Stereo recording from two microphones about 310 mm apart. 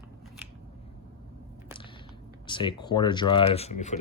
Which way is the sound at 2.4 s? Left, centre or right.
Centre.